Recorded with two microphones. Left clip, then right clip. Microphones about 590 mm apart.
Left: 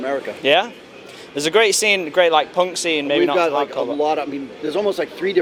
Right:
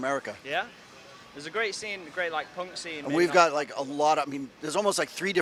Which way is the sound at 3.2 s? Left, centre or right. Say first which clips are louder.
Left 2 dB; right.